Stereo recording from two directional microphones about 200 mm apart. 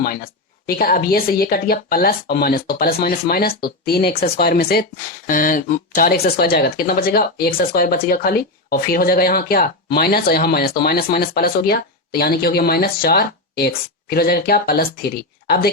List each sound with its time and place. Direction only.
0.7 s speech: 45° left (ahead or behind)